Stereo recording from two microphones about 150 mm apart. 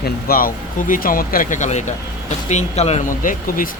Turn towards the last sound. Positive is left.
turn(degrees=65)  # may be behind; listen again after turning